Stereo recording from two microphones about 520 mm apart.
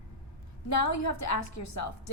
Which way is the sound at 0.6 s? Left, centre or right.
Left.